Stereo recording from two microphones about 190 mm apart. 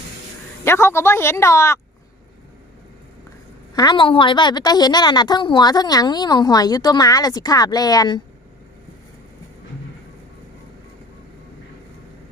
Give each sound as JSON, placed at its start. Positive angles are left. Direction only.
{"t": 0.6, "sound": "speech", "side_deg": 15}
{"t": 3.8, "sound": "a woman's voice", "side_deg": 25}